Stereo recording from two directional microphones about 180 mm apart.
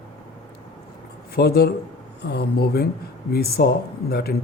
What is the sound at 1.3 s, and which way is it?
Speech, 60° left (ahead or behind).